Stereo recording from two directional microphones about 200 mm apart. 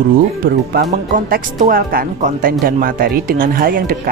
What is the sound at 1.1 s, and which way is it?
Speech, 45° right (ahead or behind).